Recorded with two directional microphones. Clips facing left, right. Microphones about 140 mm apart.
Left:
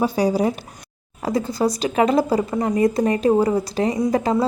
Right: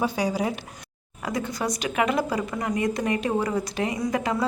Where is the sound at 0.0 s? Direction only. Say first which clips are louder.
Left 6 dB; 35° left (ahead or behind).